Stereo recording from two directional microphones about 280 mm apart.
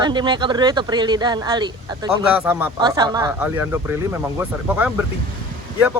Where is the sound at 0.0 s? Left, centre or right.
Centre.